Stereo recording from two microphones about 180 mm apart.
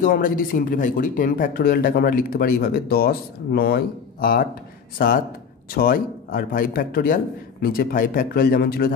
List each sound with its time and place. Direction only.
0.0 s speech: 50° left (ahead or behind)